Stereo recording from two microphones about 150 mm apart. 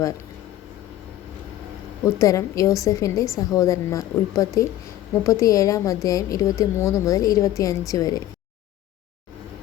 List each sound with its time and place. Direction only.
2.0 s a woman's voice: 20° left (ahead or behind)